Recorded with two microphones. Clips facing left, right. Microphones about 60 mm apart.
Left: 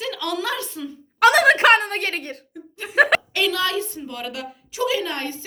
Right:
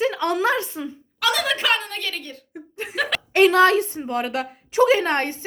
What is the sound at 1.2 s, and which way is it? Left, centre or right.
A woman's voice, left.